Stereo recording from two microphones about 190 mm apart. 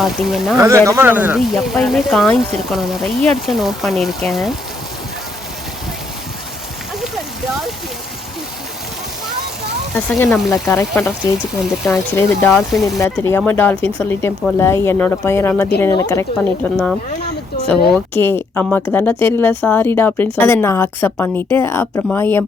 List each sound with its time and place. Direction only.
0.0 s speech: centre (ahead or behind)
0.6 s speech: 15° right (ahead or behind); by 4.5 s centre (ahead or behind)
10.1 s speech: 5° left (ahead or behind)
10.5 s speech: 15° left (ahead or behind)
11.6 s speech: centre (ahead or behind)
12.1 s speech: 15° left (ahead or behind)
12.5 s speech: centre (ahead or behind)
13.0 s speech: 10° left (ahead or behind)
17.8 s speech: 5° left (ahead or behind)